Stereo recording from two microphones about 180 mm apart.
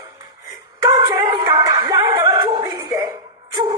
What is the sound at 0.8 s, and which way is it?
Music, 20° right (ahead or behind).